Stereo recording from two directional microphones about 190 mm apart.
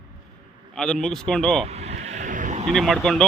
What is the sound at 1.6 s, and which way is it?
Vehicle, 35° right (ahead or behind).